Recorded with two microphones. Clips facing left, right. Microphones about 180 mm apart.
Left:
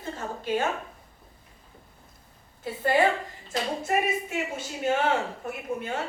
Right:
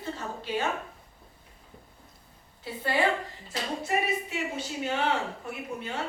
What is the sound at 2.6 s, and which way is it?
A woman's voice, 50° left (ahead or behind).